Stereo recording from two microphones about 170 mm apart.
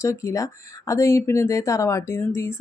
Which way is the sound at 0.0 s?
20° left (ahead or behind).